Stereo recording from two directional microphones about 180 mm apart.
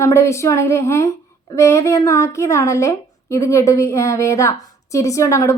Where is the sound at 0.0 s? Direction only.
15° left (ahead or behind).